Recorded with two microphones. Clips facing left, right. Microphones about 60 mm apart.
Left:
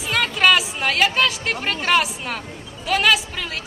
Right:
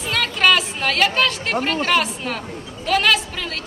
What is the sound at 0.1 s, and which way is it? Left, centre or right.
A woman's voice, centre.